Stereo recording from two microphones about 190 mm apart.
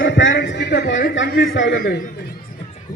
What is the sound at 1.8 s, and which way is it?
Speech, 50° left (ahead or behind).